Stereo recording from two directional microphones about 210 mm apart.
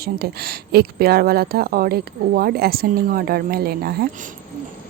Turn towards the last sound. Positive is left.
turn(degrees=-45)  # may be behind; listen again after turning